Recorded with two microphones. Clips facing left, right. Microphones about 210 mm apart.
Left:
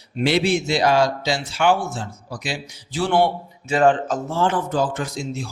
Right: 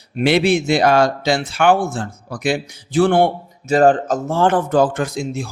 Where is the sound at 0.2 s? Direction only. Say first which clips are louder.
Right 4 dB; 60° right (ahead or behind).